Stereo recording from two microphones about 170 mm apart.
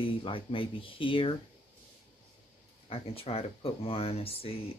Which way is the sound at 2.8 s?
35° left (ahead or behind).